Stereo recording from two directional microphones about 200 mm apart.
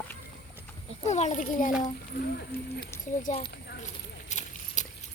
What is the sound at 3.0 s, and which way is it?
Speech, 40° left (ahead or behind).